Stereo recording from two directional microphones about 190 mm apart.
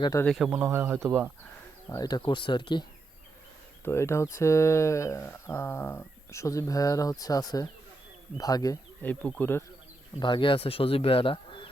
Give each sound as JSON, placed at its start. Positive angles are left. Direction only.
{"t": 0.0, "sound": "speech", "side_deg": 15}
{"t": 0.3, "sound": "speech", "side_deg": -5}
{"t": 1.9, "sound": "speech", "side_deg": 20}
{"t": 3.8, "sound": "speech", "side_deg": 15}
{"t": 10.2, "sound": "speech", "side_deg": 25}